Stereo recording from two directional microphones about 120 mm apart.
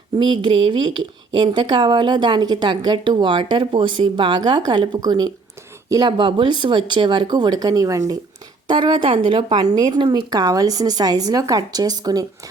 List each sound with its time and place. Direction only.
0.2 s a woman's voice: 40° right (ahead or behind)